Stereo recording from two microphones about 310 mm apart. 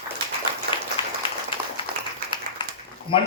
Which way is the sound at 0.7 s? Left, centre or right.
Centre.